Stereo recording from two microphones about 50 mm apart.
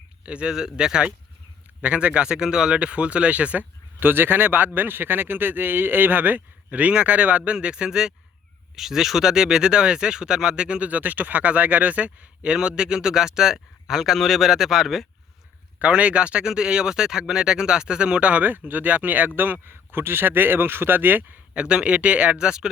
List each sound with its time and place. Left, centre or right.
0.2 s speech: right
4.0 s speech: right
12.4 s speech: centre
15.8 s speech: right
19.6 s speech: right
21.5 s speech: right